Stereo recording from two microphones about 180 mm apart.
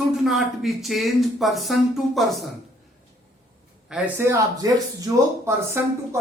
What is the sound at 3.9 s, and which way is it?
Speech, 5° right (ahead or behind).